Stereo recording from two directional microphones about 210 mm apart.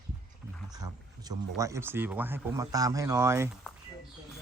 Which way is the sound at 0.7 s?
20° right (ahead or behind).